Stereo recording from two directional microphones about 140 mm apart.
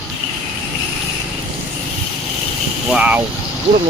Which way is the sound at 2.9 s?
10° right (ahead or behind).